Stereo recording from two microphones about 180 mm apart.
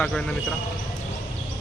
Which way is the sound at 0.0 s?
5° left (ahead or behind).